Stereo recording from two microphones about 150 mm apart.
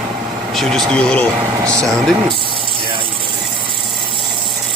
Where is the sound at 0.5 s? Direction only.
Centre (ahead or behind).